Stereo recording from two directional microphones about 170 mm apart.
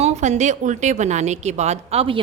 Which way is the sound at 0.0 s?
40° right (ahead or behind).